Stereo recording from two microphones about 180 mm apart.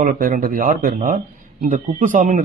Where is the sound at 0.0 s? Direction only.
45° right (ahead or behind).